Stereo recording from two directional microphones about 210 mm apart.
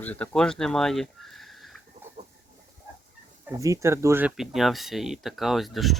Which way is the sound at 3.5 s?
15° right (ahead or behind).